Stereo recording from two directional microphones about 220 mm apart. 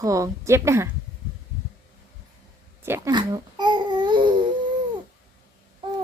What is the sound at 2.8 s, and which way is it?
Babbling, 10° right (ahead or behind).